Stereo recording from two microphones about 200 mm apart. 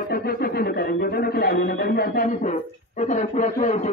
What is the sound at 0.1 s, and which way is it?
A man's voice, 50° left (ahead or behind).